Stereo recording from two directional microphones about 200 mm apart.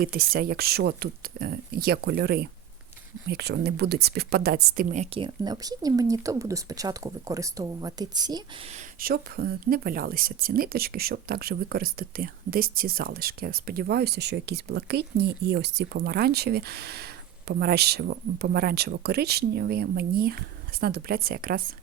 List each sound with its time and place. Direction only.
0.0 s speech: 50° right (ahead or behind)
5.1 s speech: 20° right (ahead or behind)
8.7 s speech: 45° right (ahead or behind)